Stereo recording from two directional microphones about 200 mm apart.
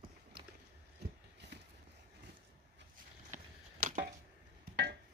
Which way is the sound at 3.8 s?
45° right (ahead or behind).